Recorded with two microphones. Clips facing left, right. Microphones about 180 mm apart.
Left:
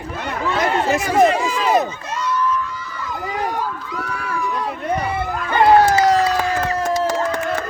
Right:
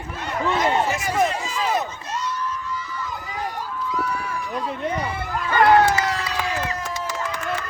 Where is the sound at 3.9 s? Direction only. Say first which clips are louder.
Even; 75° left (ahead or behind).